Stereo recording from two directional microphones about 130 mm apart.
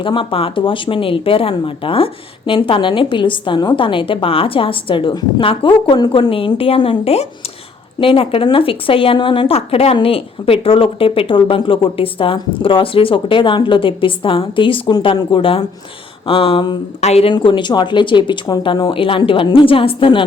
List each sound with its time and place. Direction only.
0.0 s a woman's voice: 40° left (ahead or behind)
17.0 s a woman's voice: 55° left (ahead or behind)
17.3 s a woman's voice: 40° left (ahead or behind)